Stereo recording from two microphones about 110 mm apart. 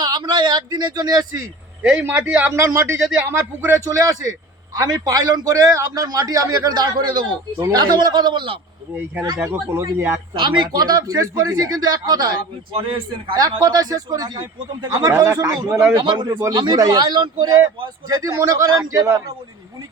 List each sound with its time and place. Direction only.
0.0 s a man's voice: 40° right (ahead or behind)
1.8 s a man's voice: 10° right (ahead or behind)
4.8 s a man's voice: 30° right (ahead or behind); by 8.5 s 45° right (ahead or behind)
9.2 s speech: 30° right (ahead or behind)
10.3 s a man's voice: 45° right (ahead or behind)
13.6 s a man's voice: 35° right (ahead or behind)
15.9 s a man's voice: 40° right (ahead or behind)